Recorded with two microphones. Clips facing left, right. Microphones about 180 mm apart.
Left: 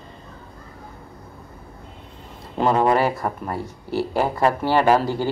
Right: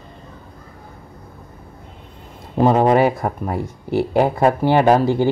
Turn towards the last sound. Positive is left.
turn(degrees=-20)  # may be behind; listen again after turning